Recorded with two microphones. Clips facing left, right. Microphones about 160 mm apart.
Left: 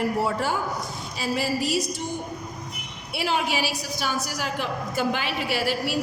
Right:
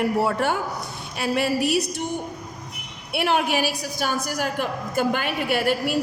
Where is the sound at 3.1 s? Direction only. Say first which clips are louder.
Right 4 dB; 60° right (ahead or behind).